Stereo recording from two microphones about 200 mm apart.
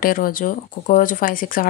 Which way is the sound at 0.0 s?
45° left (ahead or behind).